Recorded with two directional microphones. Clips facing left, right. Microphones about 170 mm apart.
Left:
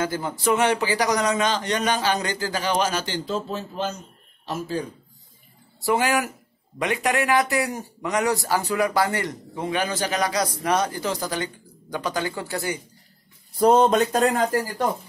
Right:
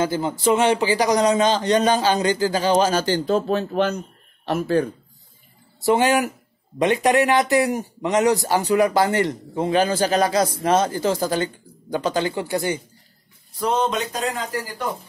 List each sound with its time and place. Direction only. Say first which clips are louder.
0.0 s speech: right 4 dB; 25° right (ahead or behind)
3.3 s speech: right 8 dB; 60° right (ahead or behind)
5.9 s speech: right 4 dB; 25° right (ahead or behind)
13.6 s speech: left 5 dB; 45° left (ahead or behind)